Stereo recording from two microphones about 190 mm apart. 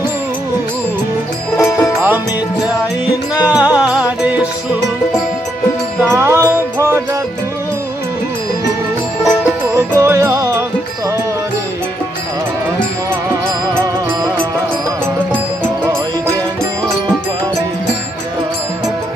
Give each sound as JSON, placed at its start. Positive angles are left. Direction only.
{"t": 1.6, "sound": "music", "side_deg": 15}
{"t": 3.5, "sound": "music", "side_deg": -5}
{"t": 5.9, "sound": "music", "side_deg": -15}
{"t": 9.8, "sound": "music", "side_deg": -15}